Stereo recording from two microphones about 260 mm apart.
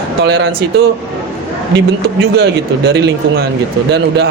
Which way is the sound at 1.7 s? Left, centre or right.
Right.